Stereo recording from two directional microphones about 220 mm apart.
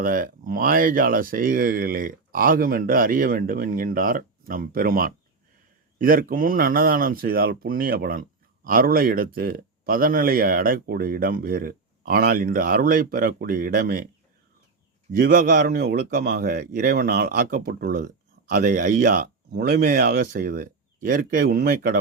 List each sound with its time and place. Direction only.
0.0 s speech: 40° right (ahead or behind)
15.1 s speech: 40° right (ahead or behind)